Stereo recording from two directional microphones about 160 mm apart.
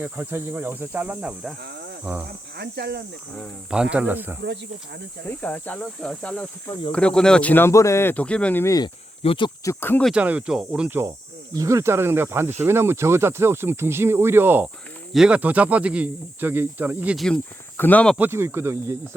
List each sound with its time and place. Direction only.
0.0 s speech: 15° right (ahead or behind)
2.6 s speech: 90° right
3.9 s speech: 10° right (ahead or behind)
5.4 s speech: 10° left (ahead or behind)
9.2 s speech: 35° left (ahead or behind)
9.6 s speech: 10° left (ahead or behind)
10.1 s speech: 10° right (ahead or behind)
17.2 s speech: 5° left (ahead or behind)
18.2 s speech: 15° right (ahead or behind)